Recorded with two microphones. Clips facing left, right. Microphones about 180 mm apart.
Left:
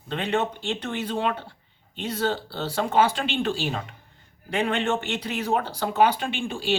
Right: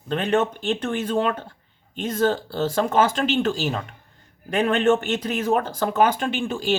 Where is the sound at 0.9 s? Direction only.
45° right (ahead or behind).